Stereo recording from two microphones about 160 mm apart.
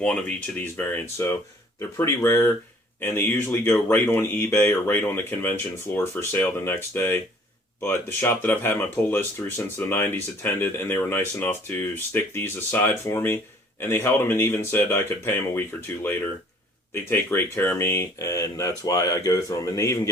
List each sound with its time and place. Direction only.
0.0 s speech: 10° left (ahead or behind)
16.9 s speech: 15° left (ahead or behind)